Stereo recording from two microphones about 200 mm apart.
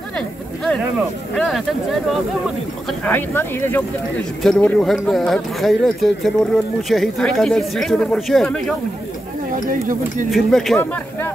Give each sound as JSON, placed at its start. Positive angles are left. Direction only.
{"t": 1.3, "sound": "speech", "side_deg": 0}
{"t": 9.7, "sound": "speech", "side_deg": -40}
{"t": 10.3, "sound": "speech", "side_deg": 0}